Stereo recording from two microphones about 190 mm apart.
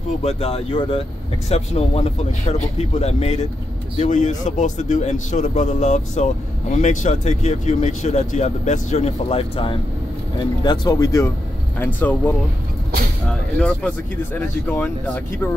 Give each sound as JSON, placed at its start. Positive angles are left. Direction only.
{"t": 0.2, "sound": "a man's voice", "side_deg": 30}